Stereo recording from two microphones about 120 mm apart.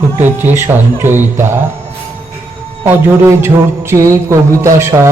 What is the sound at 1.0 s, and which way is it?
Music, 20° right (ahead or behind).